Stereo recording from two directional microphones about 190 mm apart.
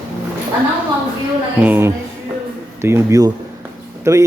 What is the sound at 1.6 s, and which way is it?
Speech, 10° right (ahead or behind).